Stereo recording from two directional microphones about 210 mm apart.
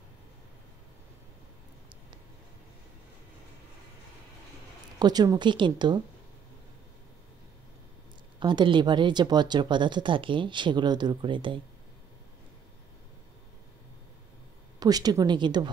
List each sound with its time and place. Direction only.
4.9 s speech: 20° right (ahead or behind)
8.4 s speech: 20° right (ahead or behind)
14.8 s speech: 20° right (ahead or behind)